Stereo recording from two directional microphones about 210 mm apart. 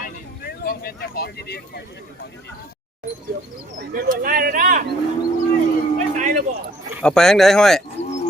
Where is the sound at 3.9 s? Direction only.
40° right (ahead or behind).